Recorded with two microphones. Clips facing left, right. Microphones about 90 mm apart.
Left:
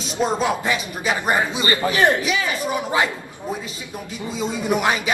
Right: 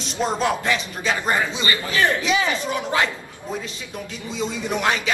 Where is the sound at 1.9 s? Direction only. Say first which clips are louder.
Even; 20° left (ahead or behind).